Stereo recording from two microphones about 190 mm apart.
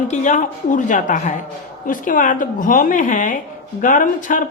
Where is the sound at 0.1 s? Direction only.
40° left (ahead or behind).